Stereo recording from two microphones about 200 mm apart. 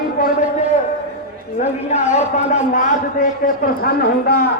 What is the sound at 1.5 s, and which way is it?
A man's voice, 35° left (ahead or behind).